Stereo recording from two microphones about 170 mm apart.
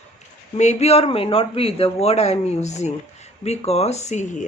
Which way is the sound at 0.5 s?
40° left (ahead or behind).